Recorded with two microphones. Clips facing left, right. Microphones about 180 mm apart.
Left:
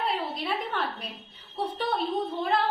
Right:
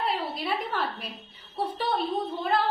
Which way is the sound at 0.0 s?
Centre (ahead or behind).